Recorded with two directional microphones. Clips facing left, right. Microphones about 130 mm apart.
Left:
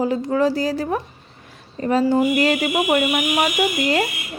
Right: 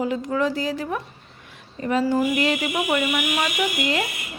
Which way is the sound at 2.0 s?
25° left (ahead or behind).